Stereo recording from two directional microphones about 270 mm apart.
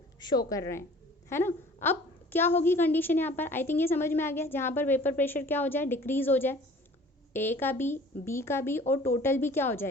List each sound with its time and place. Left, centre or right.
0.2 s a woman's voice: centre